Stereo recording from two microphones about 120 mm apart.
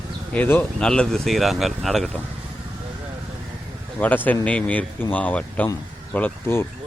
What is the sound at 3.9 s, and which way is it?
Speech, 15° left (ahead or behind).